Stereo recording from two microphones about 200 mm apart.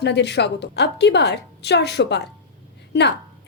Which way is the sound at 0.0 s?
60° left (ahead or behind).